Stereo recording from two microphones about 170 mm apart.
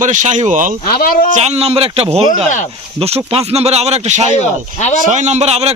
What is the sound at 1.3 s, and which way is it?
Speech, 40° right (ahead or behind).